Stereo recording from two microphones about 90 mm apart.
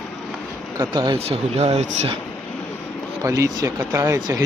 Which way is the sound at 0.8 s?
60° right (ahead or behind).